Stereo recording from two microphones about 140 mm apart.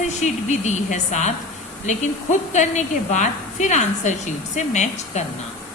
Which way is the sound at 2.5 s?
60° left (ahead or behind).